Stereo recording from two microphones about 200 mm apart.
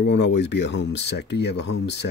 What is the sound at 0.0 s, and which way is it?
Speech, 60° left (ahead or behind).